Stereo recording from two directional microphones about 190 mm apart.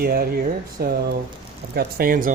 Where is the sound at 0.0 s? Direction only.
50° right (ahead or behind).